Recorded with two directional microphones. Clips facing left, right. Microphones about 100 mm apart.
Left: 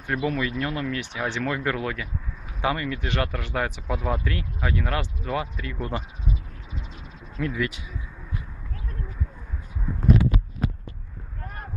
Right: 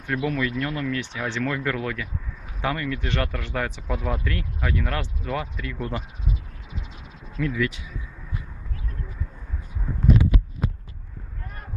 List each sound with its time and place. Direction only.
0.0 s speech: 10° left (ahead or behind)
7.3 s speech: 25° left (ahead or behind)